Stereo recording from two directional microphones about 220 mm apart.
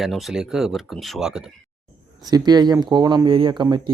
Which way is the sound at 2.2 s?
15° right (ahead or behind).